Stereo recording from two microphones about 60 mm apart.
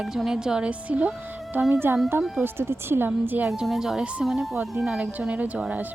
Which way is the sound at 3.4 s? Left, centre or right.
Centre.